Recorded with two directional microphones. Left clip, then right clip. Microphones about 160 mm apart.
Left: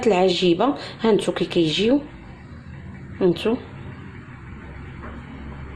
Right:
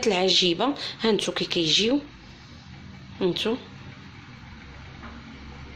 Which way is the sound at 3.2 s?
Centre (ahead or behind).